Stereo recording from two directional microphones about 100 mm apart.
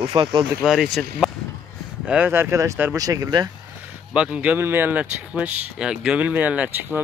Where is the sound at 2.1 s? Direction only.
20° right (ahead or behind); by 3.5 s 40° right (ahead or behind).